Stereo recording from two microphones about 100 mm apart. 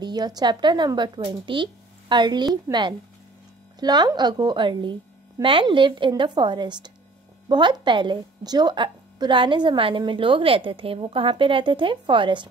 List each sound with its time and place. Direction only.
0.0 s speech: 45° right (ahead or behind)